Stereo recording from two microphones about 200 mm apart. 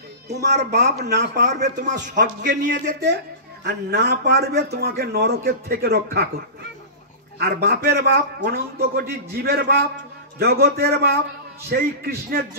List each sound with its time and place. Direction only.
0.3 s a child's voice: 55° right (ahead or behind)
2.1 s a man's voice: 40° right (ahead or behind)
2.7 s a child's voice: 55° right (ahead or behind)
7.3 s a man's voice: 50° right (ahead or behind)